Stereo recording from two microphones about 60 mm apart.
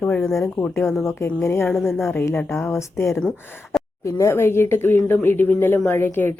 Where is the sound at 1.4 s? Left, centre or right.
Left.